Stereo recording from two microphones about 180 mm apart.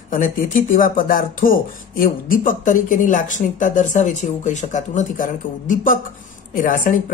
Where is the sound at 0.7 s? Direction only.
50° left (ahead or behind).